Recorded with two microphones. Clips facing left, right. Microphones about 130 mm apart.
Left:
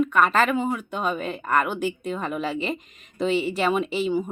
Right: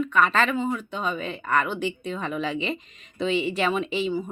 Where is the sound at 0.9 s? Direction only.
50° left (ahead or behind).